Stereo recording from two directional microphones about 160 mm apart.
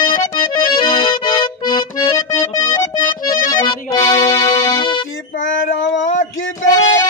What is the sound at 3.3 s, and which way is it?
Music, 25° left (ahead or behind).